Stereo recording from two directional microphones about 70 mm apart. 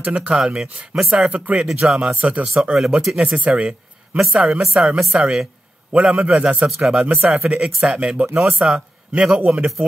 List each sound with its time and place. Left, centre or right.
0.0 s a woman's voice: centre
0.6 s a woman's voice: centre
2.1 s a woman's voice: centre